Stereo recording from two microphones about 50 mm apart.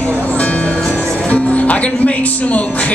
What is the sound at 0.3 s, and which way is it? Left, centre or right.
Music, left.